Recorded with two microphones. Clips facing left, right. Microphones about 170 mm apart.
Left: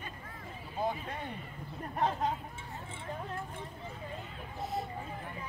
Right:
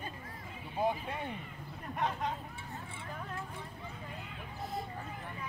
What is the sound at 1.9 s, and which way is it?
Speech, 35° left (ahead or behind).